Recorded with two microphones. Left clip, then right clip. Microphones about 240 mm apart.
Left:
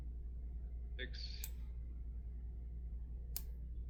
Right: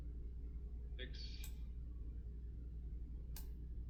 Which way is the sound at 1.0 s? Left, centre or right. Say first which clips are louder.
Left 5 dB; left.